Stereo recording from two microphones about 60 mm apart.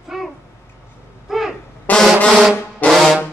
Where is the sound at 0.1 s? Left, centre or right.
Centre.